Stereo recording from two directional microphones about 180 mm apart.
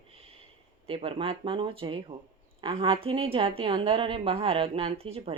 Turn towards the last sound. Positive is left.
turn(degrees=-35)  # may be behind; listen again after turning